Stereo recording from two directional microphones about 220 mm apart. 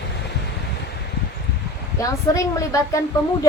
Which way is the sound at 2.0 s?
15° left (ahead or behind).